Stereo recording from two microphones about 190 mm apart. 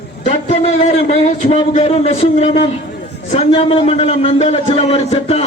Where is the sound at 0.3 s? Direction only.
35° left (ahead or behind).